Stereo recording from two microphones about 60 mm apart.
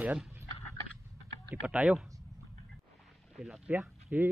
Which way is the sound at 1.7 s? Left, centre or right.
Right.